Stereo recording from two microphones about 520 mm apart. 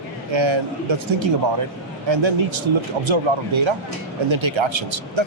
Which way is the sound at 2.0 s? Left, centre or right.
Right.